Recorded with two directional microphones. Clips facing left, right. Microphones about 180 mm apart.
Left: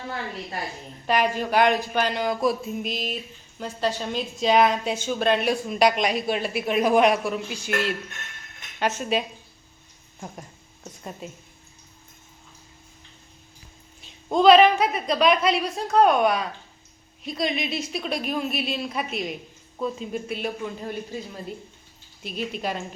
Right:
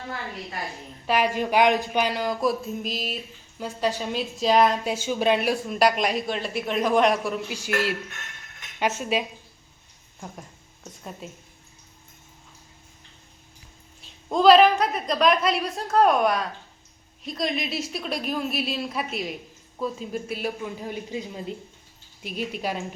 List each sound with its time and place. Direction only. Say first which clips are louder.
1.0 s speech: left 1 dB; 5° right (ahead or behind)
1.3 s speech: right 3 dB; 15° right (ahead or behind)
2.0 s speech: left 1 dB; centre (ahead or behind)
5.0 s speech: even; 10° right (ahead or behind)
8.8 s speech: even; 5° right (ahead or behind)
14.0 s speech: left 1 dB; centre (ahead or behind)